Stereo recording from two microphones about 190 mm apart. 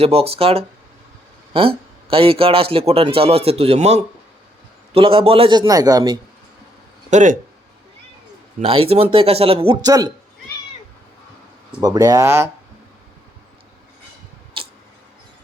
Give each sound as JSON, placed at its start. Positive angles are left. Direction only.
{"t": 0.0, "sound": "a man's voice", "side_deg": -30}
{"t": 7.1, "sound": "speech", "side_deg": -40}
{"t": 8.6, "sound": "a man's voice", "side_deg": -30}
{"t": 11.8, "sound": "speech", "side_deg": -20}
{"t": 14.5, "sound": "tick-tock", "side_deg": -30}